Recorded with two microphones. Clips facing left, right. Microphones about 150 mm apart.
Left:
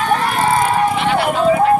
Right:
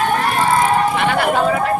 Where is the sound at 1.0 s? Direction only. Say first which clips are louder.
Even; 50° right (ahead or behind).